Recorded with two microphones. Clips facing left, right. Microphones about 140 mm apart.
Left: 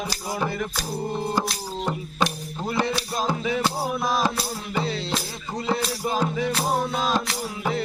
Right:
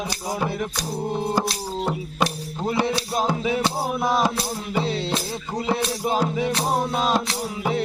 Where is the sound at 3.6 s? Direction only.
25° right (ahead or behind).